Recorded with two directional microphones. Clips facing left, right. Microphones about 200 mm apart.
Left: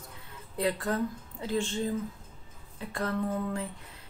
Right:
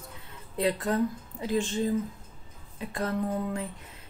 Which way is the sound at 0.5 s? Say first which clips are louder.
Right 3 dB; 20° right (ahead or behind).